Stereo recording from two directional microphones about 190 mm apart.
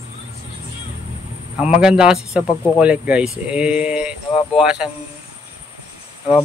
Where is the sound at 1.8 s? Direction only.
5° right (ahead or behind).